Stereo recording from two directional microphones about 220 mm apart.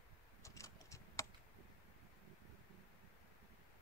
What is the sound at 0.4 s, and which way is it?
Typing, 15° left (ahead or behind).